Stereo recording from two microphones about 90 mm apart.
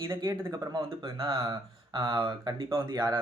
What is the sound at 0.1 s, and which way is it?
Speech, 40° right (ahead or behind).